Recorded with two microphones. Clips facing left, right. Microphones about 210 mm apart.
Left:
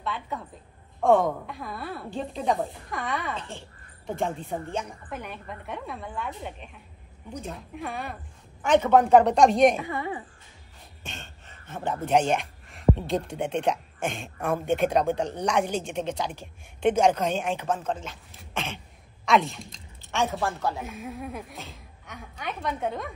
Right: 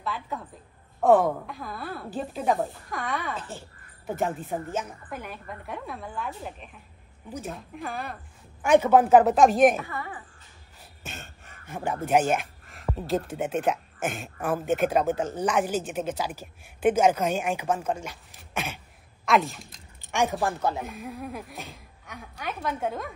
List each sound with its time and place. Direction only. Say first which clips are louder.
0.0 s speech: even; centre (ahead or behind)
9.8 s a woman's voice: left 4 dB; 20° left (ahead or behind)
11.1 s speech: right 1 dB; 10° right (ahead or behind)
20.0 s speech: right 1 dB; 15° right (ahead or behind)
20.8 s speech: even; centre (ahead or behind)